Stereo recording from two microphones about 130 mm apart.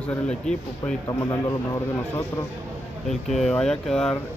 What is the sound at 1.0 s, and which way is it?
Speech, 30° left (ahead or behind).